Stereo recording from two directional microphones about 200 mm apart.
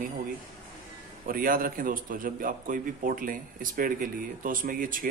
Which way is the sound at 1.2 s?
45° right (ahead or behind).